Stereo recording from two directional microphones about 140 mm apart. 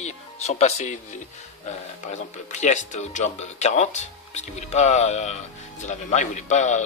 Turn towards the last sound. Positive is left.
turn(degrees=55)  # may be behind; listen again after turning